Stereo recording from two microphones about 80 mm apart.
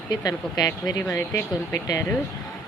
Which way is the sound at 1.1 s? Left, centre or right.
Left.